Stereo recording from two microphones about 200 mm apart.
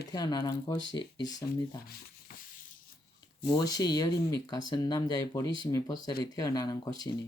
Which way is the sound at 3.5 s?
20° left (ahead or behind).